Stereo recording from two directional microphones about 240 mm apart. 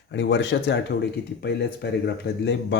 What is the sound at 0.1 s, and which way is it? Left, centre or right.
Speech, left.